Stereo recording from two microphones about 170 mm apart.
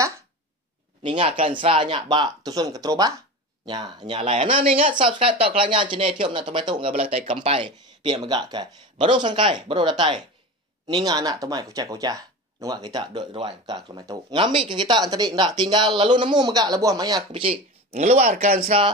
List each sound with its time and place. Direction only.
1.0 s speech: 30° right (ahead or behind); by 18.7 s 50° right (ahead or behind)